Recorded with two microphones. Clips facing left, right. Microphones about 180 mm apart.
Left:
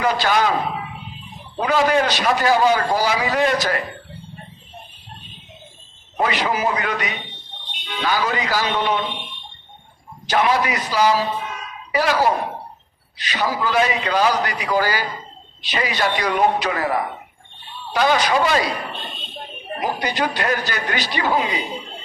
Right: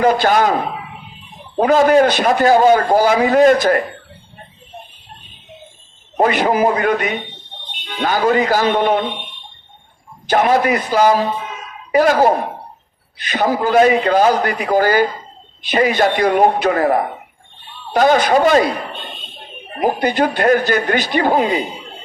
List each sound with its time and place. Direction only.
0.0 s a man's voice: 50° right (ahead or behind)
1.5 s a man's voice: 45° right (ahead or behind)
6.1 s a man's voice: 50° right (ahead or behind)
10.2 s a man's voice: 45° right (ahead or behind)
19.8 s a man's voice: 50° right (ahead or behind)